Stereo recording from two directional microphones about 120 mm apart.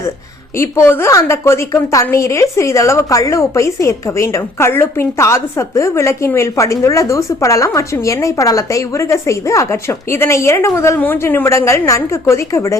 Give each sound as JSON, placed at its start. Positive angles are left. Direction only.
{"t": 0.5, "sound": "a woman's voice", "side_deg": 20}